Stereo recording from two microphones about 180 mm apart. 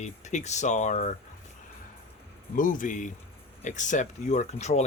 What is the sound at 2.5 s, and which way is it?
Speech, 45° left (ahead or behind).